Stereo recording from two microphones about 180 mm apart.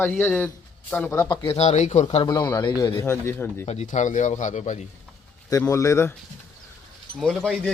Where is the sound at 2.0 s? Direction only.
25° left (ahead or behind); by 3.6 s 10° left (ahead or behind).